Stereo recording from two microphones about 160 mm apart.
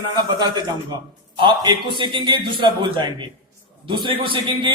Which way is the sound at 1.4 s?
30° right (ahead or behind).